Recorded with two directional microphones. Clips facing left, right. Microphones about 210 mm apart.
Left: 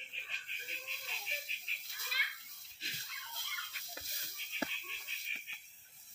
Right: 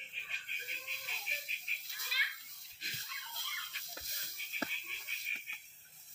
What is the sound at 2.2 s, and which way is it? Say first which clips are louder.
Children playing: right 3 dB; 50° left (ahead or behind).